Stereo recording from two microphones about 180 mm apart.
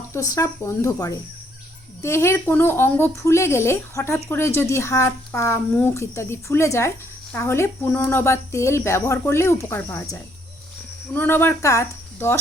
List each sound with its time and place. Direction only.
0.1 s a woman's voice: 15° left (ahead or behind)